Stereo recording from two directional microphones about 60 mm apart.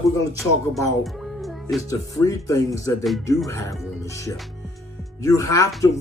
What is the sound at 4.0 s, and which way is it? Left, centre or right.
Music, left.